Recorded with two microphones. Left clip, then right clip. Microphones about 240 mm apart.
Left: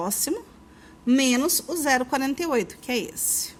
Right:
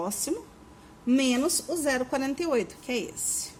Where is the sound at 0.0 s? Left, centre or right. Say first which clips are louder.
Left 3 dB; left.